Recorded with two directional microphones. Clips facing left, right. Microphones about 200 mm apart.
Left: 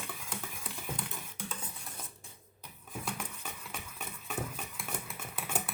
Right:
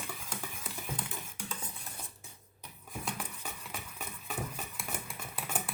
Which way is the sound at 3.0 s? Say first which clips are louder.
Even; 10° right (ahead or behind).